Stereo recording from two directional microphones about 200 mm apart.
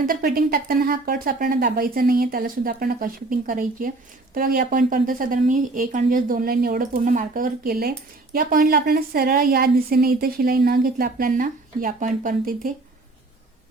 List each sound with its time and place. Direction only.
0.0 s speech: 45° right (ahead or behind)